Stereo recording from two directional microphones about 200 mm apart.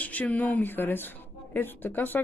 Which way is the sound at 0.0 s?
5° left (ahead or behind).